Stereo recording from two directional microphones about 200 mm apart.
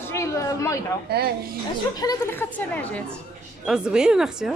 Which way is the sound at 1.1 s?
50° right (ahead or behind).